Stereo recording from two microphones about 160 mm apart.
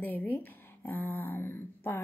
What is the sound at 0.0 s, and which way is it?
A woman's voice, 10° left (ahead or behind).